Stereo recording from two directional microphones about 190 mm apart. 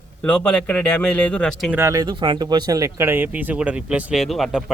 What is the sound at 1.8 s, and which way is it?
Speech, 15° right (ahead or behind).